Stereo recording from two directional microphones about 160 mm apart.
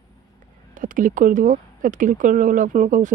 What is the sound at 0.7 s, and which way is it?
Speech, 55° right (ahead or behind).